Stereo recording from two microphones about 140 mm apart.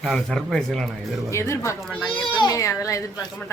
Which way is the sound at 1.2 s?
20° left (ahead or behind).